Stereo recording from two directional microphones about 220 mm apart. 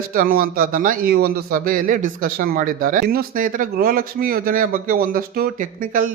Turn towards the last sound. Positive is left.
turn(degrees=-40)  # may be behind; listen again after turning